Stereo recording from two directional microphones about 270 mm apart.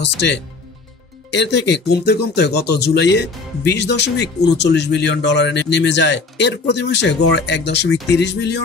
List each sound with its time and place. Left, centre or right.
0.0 s speech: left